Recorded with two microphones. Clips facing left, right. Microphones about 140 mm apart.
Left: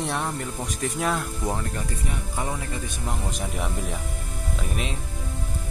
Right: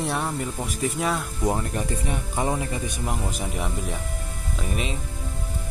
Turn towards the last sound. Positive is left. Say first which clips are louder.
# right 1 dB
turn(degrees=0)  # may be behind; listen again after turning